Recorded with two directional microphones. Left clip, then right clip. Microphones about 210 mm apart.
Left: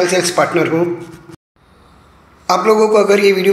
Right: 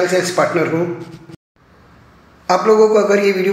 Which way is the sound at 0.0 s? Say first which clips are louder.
Left 1 dB; 25° left (ahead or behind).